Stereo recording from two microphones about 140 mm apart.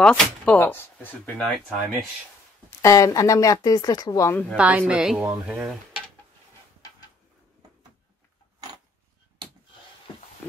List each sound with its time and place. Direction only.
0.0 s speech: 10° left (ahead or behind)
1.4 s speech: centre (ahead or behind)
2.8 s speech: 25° left (ahead or behind)
4.3 s speech: 10° left (ahead or behind)
4.6 s a woman's voice: 10° right (ahead or behind)